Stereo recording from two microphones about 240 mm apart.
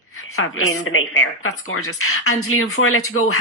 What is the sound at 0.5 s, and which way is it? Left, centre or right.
Speech, left.